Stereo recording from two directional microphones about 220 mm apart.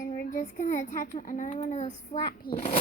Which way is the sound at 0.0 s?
35° left (ahead or behind).